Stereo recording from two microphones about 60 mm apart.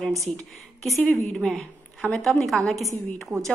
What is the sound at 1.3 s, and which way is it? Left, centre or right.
A woman's voice, centre.